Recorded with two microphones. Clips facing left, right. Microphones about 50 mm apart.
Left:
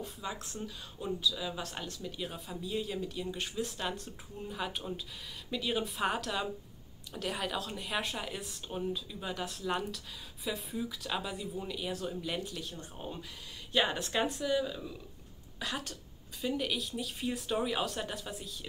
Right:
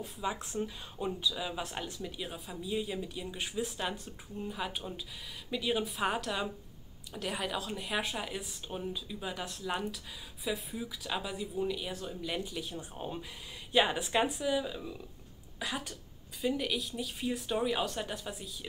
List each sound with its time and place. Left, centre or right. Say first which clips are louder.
0.2 s speech: right 8 dB; centre
12.5 s speech: right 3 dB; centre